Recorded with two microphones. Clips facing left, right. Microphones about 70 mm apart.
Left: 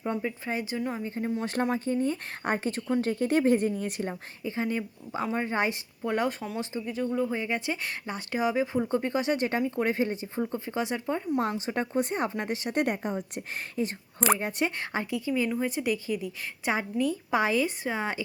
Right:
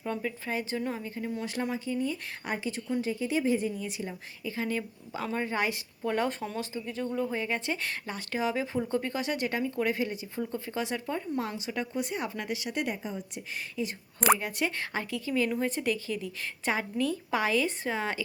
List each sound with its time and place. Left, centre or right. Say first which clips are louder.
0.0 s speech: left 2 dB; centre
1.0 s speech: left 4 dB; left
1.7 s a woman's voice: left 4 dB; left
4.4 s speech: left 2 dB; left
6.1 s a woman's voice: left 1 dB; centre
11.3 s speech: left 4 dB; left
14.3 s speech: left 2 dB; left
15.4 s a woman's voice: left 1 dB; centre